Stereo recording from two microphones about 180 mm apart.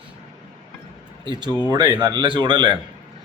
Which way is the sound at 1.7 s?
25° right (ahead or behind).